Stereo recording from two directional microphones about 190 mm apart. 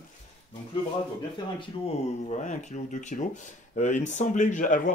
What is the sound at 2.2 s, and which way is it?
Speech, 40° left (ahead or behind).